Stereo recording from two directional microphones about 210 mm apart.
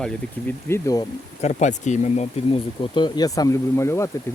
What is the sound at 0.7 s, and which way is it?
Speech, 15° left (ahead or behind).